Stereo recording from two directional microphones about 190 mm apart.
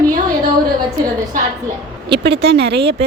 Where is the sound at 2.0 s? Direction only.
60° right (ahead or behind).